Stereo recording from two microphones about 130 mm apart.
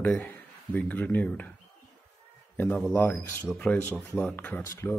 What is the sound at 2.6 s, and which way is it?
Speech, 15° left (ahead or behind).